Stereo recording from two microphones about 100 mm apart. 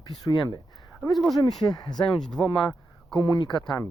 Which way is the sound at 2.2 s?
5° left (ahead or behind).